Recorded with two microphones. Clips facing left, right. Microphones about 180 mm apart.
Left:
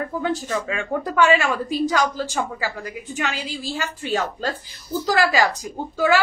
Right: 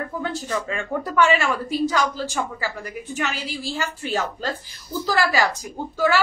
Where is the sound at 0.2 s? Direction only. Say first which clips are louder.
Left 3 dB; 15° left (ahead or behind).